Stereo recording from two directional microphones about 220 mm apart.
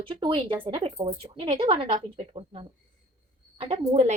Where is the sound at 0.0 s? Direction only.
20° right (ahead or behind).